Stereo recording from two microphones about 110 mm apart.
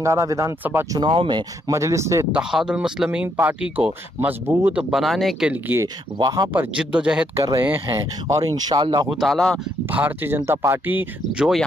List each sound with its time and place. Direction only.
0.0 s speech: 30° right (ahead or behind)
1.0 s speech: 55° right (ahead or behind)
1.7 s speech: 30° right (ahead or behind)
2.3 s speech: 10° right (ahead or behind)
4.7 s speech: centre (ahead or behind)
5.5 s speech: 20° right (ahead or behind)
6.1 s speech: 40° right (ahead or behind)
6.5 s speech: 15° right (ahead or behind)
7.3 s speech: 35° right (ahead or behind)
9.0 s speech: centre (ahead or behind)
9.8 s speech: 15° right (ahead or behind)